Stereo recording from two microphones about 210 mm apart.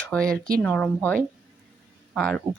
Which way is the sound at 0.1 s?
5° left (ahead or behind).